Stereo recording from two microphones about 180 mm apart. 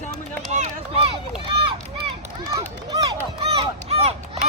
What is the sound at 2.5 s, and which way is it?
Run, 20° right (ahead or behind).